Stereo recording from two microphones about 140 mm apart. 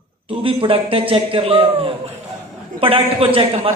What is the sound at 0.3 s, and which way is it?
A man's voice, 40° right (ahead or behind).